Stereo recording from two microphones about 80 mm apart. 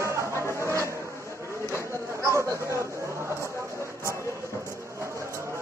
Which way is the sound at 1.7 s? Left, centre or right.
Right.